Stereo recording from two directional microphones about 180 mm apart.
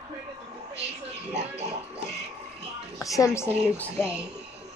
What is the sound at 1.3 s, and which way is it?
Pig, 35° right (ahead or behind).